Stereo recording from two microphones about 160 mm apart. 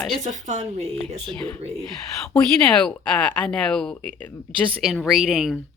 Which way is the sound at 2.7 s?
5° left (ahead or behind).